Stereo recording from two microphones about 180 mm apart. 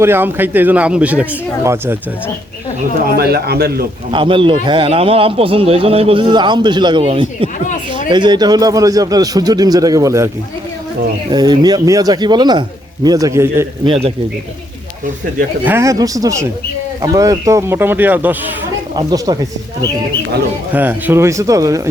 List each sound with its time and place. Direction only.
0.0 s speech: 10° right (ahead or behind)
3.1 s speech: 60° right (ahead or behind)
4.1 s a man's voice: 30° right (ahead or behind)
7.7 s a sound: 45° left (ahead or behind)
8.1 s a man's voice: 25° right (ahead or behind)
11.3 s a man's voice: 20° right (ahead or behind)
13.8 s a man's voice: 30° right (ahead or behind)
15.6 s a man's voice: 15° right (ahead or behind)
18.9 s a man's voice: 20° right (ahead or behind)
20.7 s speech: 10° right (ahead or behind)